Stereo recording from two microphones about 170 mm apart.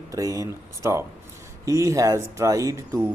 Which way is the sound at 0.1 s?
20° right (ahead or behind).